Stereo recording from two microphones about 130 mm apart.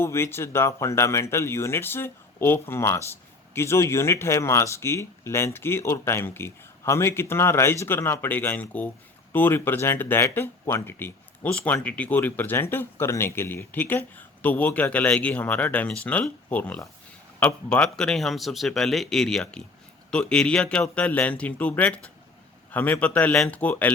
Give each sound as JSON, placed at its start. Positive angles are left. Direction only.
{"t": 0.0, "sound": "speech", "side_deg": 20}